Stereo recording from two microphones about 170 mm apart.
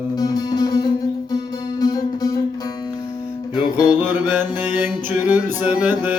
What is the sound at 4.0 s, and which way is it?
Mantra, 10° right (ahead or behind).